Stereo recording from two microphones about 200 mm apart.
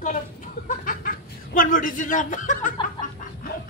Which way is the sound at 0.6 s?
45° left (ahead or behind).